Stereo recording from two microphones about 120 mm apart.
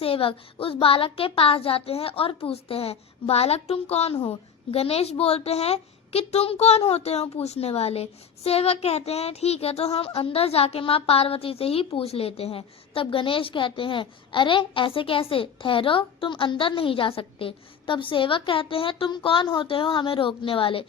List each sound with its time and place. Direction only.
0.0 s a child's voice: 50° left (ahead or behind)